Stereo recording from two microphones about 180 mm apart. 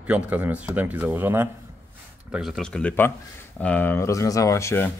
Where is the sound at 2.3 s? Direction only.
Centre (ahead or behind).